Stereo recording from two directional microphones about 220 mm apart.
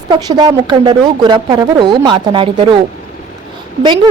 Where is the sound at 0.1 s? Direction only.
20° right (ahead or behind).